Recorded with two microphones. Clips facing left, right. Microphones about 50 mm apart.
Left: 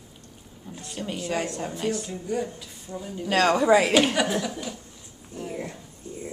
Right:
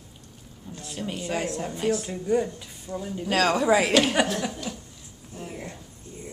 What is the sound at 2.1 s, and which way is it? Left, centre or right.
Speech, centre.